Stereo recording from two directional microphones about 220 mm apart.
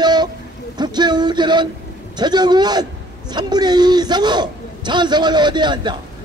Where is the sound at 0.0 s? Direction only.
20° right (ahead or behind).